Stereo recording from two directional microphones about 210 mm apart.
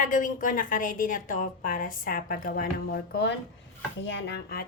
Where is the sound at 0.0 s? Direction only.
40° left (ahead or behind).